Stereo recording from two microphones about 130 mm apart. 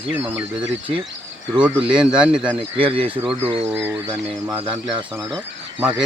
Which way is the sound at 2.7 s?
45° right (ahead or behind).